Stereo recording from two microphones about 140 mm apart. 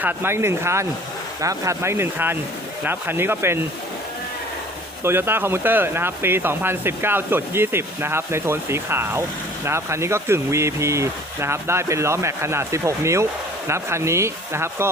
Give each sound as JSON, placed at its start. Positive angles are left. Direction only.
{"t": 0.0, "sound": "speech", "side_deg": -15}
{"t": 5.0, "sound": "speech", "side_deg": -15}